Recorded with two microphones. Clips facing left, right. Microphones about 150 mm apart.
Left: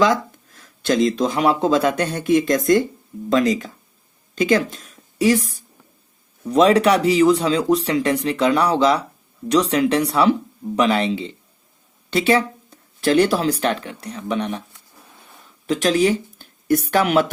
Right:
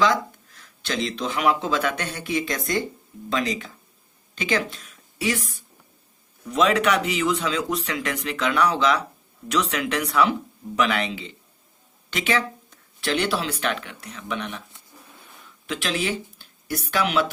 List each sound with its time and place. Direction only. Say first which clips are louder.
0.0 s speech: left 4 dB; 45° left (ahead or behind)
4.4 s a sound: left 7 dB; 40° left (ahead or behind)
6.4 s speech: left 6 dB; 35° left (ahead or behind)
15.6 s speech: left 10 dB; 40° left (ahead or behind)